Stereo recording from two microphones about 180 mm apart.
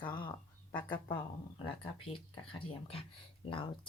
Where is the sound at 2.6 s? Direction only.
30° left (ahead or behind).